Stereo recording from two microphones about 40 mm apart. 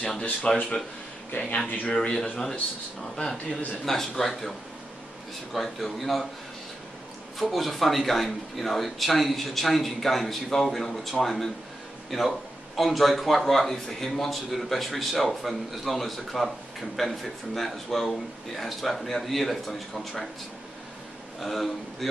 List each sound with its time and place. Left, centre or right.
0.5 s a man's voice: centre
1.3 s speech: left
1.7 s speech: left
2.0 s a man's voice: centre
3.8 s a man's voice: centre
7.3 s a man's voice: centre
21.4 s a man's voice: centre